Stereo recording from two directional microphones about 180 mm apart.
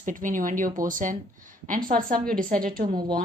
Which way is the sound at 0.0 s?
45° right (ahead or behind).